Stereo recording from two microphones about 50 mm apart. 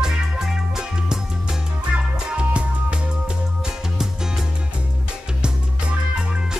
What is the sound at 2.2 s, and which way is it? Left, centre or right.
Music, right.